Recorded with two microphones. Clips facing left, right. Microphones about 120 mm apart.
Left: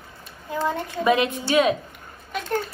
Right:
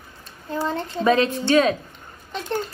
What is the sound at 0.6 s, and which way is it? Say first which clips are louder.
A child's voice: right 1 dB; 15° left (ahead or behind).